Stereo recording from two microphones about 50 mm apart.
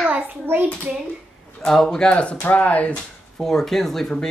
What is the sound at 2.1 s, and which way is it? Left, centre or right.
Speech, left.